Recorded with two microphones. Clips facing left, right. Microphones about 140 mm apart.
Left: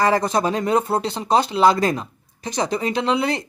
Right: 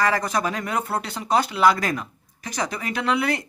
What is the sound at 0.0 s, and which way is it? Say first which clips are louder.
Speech: left 4 dB; 25° left (ahead or behind).